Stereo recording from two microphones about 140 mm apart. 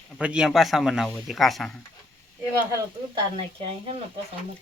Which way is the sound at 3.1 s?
40° right (ahead or behind).